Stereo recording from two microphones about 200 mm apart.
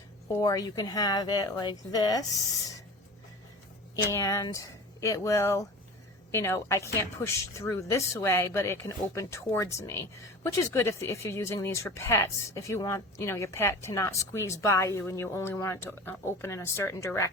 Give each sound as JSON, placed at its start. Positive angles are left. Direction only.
{"t": 0.3, "sound": "speech", "side_deg": 20}
{"t": 4.1, "sound": "speech", "side_deg": 15}